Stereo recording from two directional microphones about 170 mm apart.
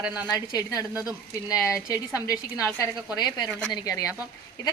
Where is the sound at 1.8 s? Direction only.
20° left (ahead or behind).